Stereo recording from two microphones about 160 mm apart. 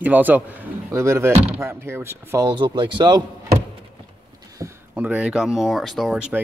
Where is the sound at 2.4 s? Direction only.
30° right (ahead or behind).